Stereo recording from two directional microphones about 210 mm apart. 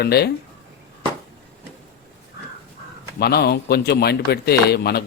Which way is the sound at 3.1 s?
50° left (ahead or behind).